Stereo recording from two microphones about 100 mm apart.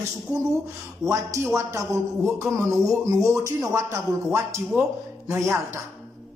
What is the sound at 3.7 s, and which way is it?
Speech, 30° right (ahead or behind).